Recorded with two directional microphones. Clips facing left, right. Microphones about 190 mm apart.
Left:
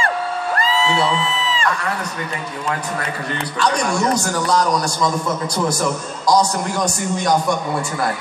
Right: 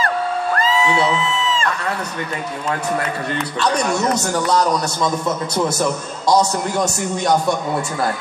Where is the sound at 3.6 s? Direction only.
25° right (ahead or behind).